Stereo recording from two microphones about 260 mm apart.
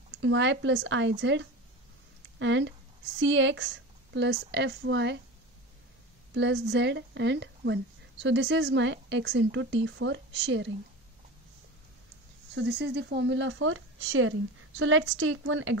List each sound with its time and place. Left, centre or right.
0.2 s speech: right
6.3 s speech: right
12.5 s speech: right